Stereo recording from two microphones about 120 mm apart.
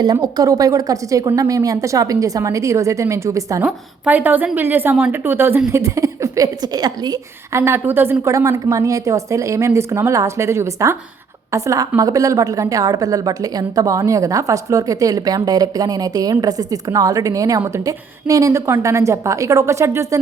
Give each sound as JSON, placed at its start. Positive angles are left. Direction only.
{"t": 0.0, "sound": "a woman's voice", "side_deg": -35}
{"t": 3.7, "sound": "a woman's voice", "side_deg": -10}
{"t": 7.6, "sound": "a woman's voice", "side_deg": -20}